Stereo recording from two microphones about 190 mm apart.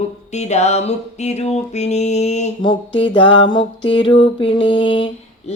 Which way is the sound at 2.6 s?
25° left (ahead or behind).